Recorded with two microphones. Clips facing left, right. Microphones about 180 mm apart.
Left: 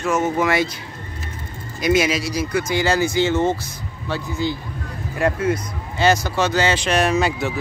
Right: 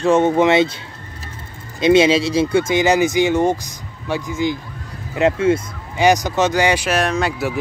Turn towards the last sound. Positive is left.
turn(degrees=0)  # may be behind; listen again after turning